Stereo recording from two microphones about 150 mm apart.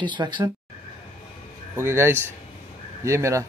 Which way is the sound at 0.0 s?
30° right (ahead or behind).